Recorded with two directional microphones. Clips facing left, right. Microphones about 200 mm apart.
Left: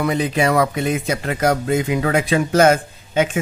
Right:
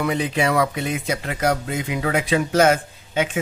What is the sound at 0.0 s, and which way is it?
A man's voice, 40° left (ahead or behind).